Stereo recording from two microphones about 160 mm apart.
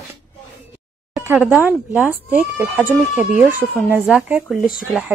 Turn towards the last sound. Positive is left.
turn(degrees=-5)  # may be behind; listen again after turning